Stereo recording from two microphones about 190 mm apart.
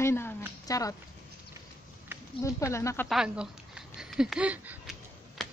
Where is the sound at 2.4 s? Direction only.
15° left (ahead or behind).